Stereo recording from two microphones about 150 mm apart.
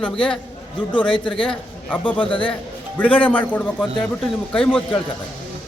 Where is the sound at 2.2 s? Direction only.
35° left (ahead or behind).